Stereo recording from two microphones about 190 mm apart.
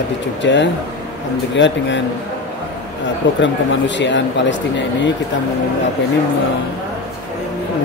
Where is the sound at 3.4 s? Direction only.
75° left (ahead or behind).